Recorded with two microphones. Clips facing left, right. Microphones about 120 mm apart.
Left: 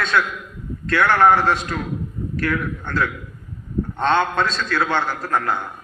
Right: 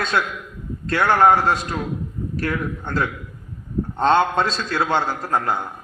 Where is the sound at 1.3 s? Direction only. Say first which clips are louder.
Even; 40° right (ahead or behind).